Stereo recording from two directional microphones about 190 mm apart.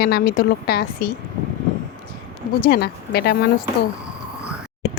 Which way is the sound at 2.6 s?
55° left (ahead or behind).